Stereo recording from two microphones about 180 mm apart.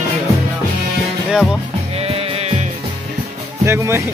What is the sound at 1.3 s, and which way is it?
Music, 5° right (ahead or behind).